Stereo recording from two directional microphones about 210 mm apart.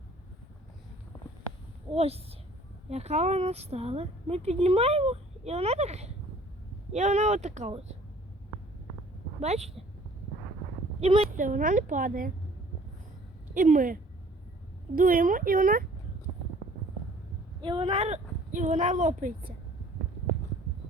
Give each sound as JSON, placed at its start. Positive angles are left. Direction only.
{"t": 1.9, "sound": "a woman's voice", "side_deg": -30}
{"t": 9.4, "sound": "a woman's voice", "side_deg": -30}
{"t": 11.0, "sound": "a woman's voice", "side_deg": -30}
{"t": 13.5, "sound": "a woman's voice", "side_deg": -40}
{"t": 17.6, "sound": "speech", "side_deg": -25}